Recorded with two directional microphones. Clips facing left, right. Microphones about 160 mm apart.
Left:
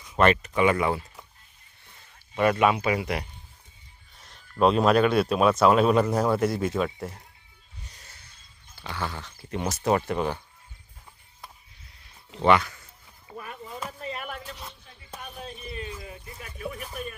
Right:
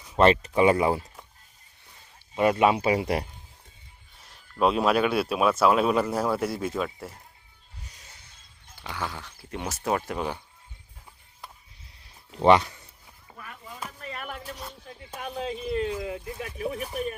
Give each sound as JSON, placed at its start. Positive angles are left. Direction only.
{"t": 0.0, "sound": "speech", "side_deg": -30}
{"t": 2.3, "sound": "speech", "side_deg": -25}
{"t": 4.6, "sound": "speech", "side_deg": -5}
{"t": 7.9, "sound": "a sound", "side_deg": -15}
{"t": 8.8, "sound": "speech", "side_deg": -10}
{"t": 12.4, "sound": "speech", "side_deg": -35}
{"t": 15.2, "sound": "a sound", "side_deg": -90}